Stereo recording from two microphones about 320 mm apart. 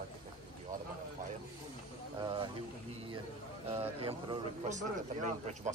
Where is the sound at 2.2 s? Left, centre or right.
Centre.